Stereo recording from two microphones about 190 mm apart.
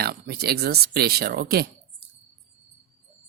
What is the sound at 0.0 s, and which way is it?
Speech, 55° right (ahead or behind).